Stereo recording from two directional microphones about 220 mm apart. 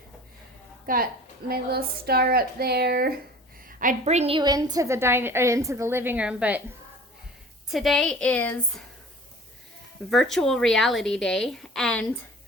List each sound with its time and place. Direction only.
0.9 s a woman's voice: 40° right (ahead or behind); by 6.6 s 5° right (ahead or behind)
7.7 s a woman's voice: centre (ahead or behind)
10.1 s a woman's voice: centre (ahead or behind)